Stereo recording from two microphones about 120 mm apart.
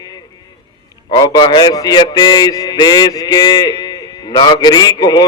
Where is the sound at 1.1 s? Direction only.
35° left (ahead or behind).